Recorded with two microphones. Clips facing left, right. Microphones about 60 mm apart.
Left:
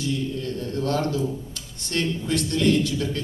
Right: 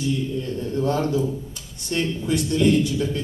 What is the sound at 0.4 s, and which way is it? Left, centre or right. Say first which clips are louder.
A man's voice: right 3 dB; centre.